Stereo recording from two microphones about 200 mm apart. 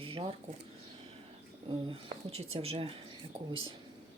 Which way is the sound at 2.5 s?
30° right (ahead or behind).